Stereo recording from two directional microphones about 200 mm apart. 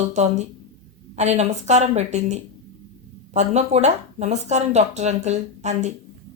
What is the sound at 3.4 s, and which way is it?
Speech, 35° right (ahead or behind).